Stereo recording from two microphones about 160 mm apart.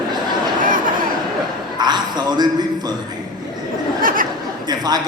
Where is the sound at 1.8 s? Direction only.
25° right (ahead or behind).